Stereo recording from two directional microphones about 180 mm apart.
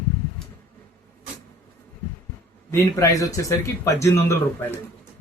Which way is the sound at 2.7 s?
20° left (ahead or behind).